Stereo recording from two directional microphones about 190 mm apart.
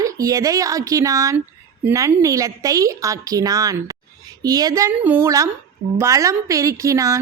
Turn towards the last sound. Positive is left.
turn(degrees=-15)  # may be behind; listen again after turning